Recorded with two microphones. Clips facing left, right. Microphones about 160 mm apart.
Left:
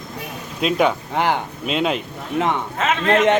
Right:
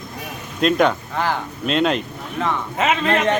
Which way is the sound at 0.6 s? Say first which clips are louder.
Right 1 dB; 5° left (ahead or behind).